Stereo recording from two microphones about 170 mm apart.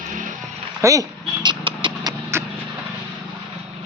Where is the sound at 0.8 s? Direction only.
20° right (ahead or behind).